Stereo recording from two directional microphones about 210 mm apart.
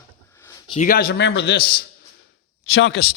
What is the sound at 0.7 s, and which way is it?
A man's voice, 40° left (ahead or behind).